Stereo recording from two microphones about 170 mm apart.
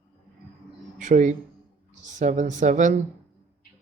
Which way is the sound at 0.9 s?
50° right (ahead or behind).